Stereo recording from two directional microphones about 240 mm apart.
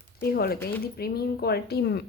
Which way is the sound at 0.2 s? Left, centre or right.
Left.